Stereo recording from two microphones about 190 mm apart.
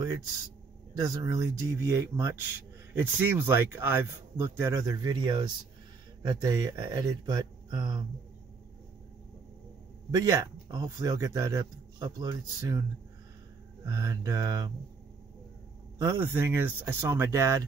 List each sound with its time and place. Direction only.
0.9 s speech: 15° right (ahead or behind)
10.1 s speech: 15° right (ahead or behind)
13.8 s speech: 20° right (ahead or behind)
16.0 s speech: 15° right (ahead or behind)